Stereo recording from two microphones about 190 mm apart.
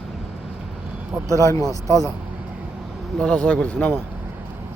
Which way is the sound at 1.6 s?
15° right (ahead or behind).